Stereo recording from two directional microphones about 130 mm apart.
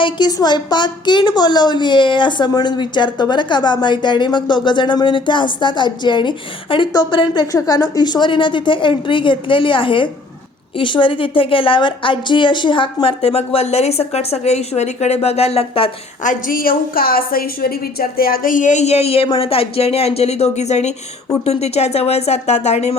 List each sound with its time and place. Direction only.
0.0 s a woman's voice: 30° left (ahead or behind)
16.2 s a woman's voice: 85° left
18.4 s a woman's voice: 85° left; by 23.0 s 55° left (ahead or behind)